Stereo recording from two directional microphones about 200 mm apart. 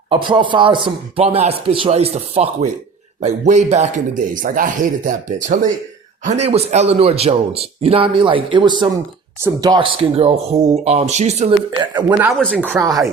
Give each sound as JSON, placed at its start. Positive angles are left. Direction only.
{"t": 0.1, "sound": "speech", "side_deg": -25}
{"t": 11.9, "sound": "speech", "side_deg": -15}
{"t": 12.3, "sound": "speech", "side_deg": 5}
{"t": 12.6, "sound": "speech", "side_deg": -15}